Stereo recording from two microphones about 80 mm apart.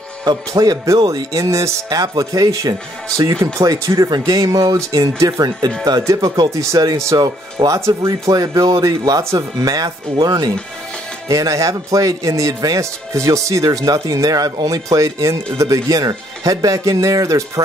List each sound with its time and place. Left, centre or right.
0.2 s a man's voice: right
7.1 s a man's voice: right
11.2 s a man's voice: right